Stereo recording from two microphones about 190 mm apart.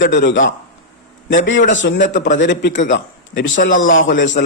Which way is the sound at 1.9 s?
45° left (ahead or behind).